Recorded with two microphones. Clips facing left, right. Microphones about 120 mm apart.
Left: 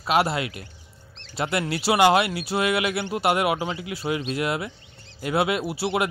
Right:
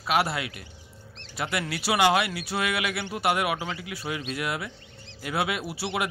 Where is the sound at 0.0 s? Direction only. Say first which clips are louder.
Left 3 dB; 25° left (ahead or behind).